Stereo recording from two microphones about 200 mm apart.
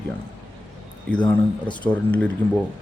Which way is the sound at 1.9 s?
5° left (ahead or behind).